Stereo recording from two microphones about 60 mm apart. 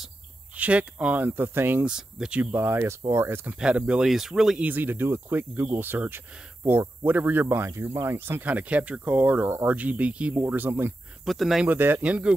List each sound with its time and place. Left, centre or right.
0.6 s speech: right
1.2 s speech: right
1.9 s speech: centre
2.5 s speech: right
2.8 s speech: right
3.7 s speech: right
4.0 s speech: centre
4.6 s speech: right
8.3 s speech: right
10.5 s speech: right
11.2 s speech: centre
11.6 s speech: right
12.0 s speech: centre